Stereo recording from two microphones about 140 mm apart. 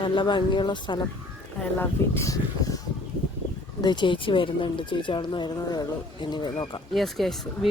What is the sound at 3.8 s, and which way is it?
Speech, 35° left (ahead or behind).